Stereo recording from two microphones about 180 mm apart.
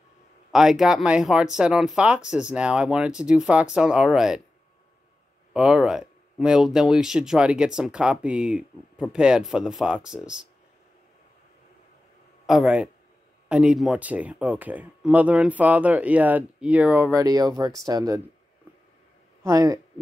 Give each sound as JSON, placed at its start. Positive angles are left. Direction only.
{"t": 0.5, "sound": "speech", "side_deg": 0}
{"t": 5.5, "sound": "speech", "side_deg": -5}
{"t": 12.4, "sound": "speech", "side_deg": -5}
{"t": 19.4, "sound": "speech", "side_deg": -20}